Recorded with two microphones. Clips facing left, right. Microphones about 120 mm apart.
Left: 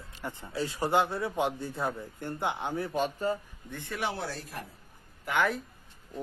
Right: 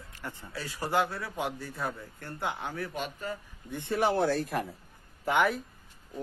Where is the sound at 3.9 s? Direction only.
45° right (ahead or behind); by 4.6 s 65° right (ahead or behind).